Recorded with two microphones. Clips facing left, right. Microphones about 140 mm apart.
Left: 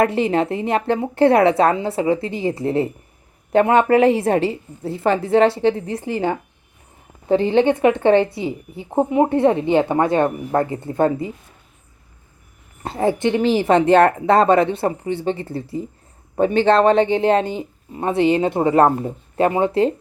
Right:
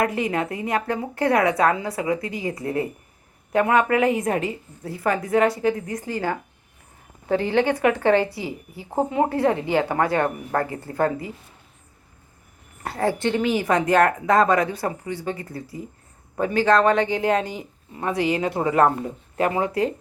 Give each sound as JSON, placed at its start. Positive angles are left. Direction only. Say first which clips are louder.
{"t": 0.0, "sound": "speech", "louder": "left 6 dB", "side_deg": 30}
{"t": 12.8, "sound": "speech", "louder": "left 4 dB", "side_deg": 20}
{"t": 13.4, "sound": "speech", "louder": "left 7 dB", "side_deg": 30}